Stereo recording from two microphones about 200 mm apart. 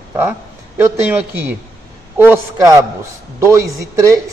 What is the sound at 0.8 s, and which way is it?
Speech, 10° right (ahead or behind).